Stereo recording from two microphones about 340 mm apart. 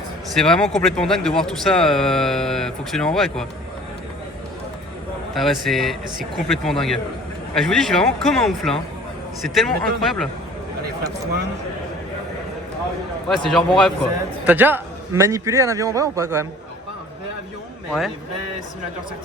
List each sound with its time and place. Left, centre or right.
0.3 s speech: centre
5.3 s speech: centre
13.2 s a man's voice: centre